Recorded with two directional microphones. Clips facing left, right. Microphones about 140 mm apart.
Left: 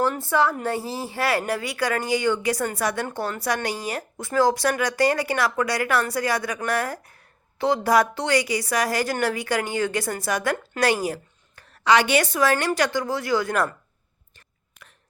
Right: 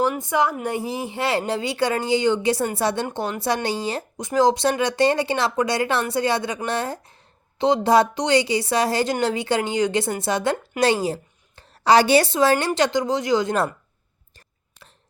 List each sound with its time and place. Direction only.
0.0 s a woman's voice: 15° right (ahead or behind)
14.3 s whispering: 30° right (ahead or behind)